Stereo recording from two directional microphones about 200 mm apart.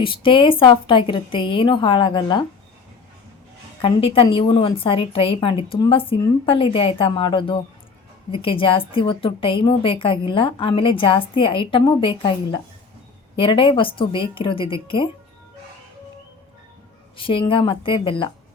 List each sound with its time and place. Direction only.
0.0 s a woman's voice: 25° left (ahead or behind)
3.8 s a woman's voice: 25° left (ahead or behind)
17.2 s a woman's voice: 25° left (ahead or behind)